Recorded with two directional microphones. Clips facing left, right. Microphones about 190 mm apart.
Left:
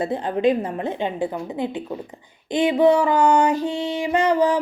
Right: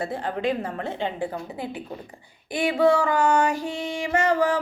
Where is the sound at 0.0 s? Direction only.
20° left (ahead or behind).